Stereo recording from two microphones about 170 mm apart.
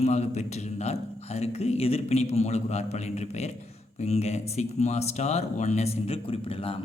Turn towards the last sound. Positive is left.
turn(degrees=35)  # may be behind; listen again after turning